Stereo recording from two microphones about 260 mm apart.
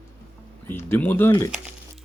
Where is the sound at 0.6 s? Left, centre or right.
Centre.